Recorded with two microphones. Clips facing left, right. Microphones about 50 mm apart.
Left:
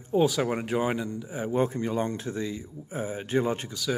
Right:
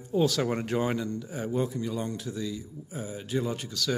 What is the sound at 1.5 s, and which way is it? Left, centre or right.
Speech, left.